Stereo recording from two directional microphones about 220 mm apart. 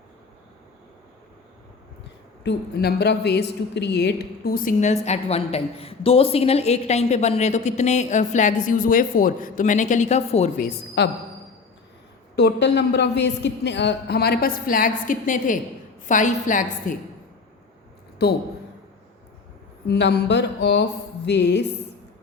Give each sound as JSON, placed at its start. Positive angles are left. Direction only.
{"t": 2.4, "sound": "a woman's voice", "side_deg": 50}
{"t": 11.0, "sound": "a woman's voice", "side_deg": 50}
{"t": 12.4, "sound": "a woman's voice", "side_deg": 50}
{"t": 18.2, "sound": "a woman's voice", "side_deg": 45}
{"t": 19.9, "sound": "a woman's voice", "side_deg": 50}